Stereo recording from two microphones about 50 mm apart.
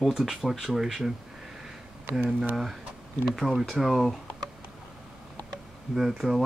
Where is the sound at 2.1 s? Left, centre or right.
Right.